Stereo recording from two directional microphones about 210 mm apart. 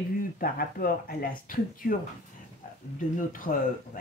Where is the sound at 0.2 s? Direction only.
45° left (ahead or behind).